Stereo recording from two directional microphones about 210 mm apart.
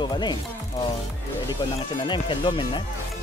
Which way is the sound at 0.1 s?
20° left (ahead or behind).